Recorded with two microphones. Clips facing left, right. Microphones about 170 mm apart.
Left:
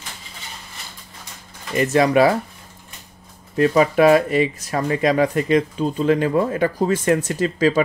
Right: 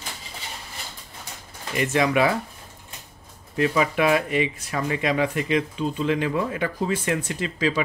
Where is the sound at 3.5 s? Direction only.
40° left (ahead or behind).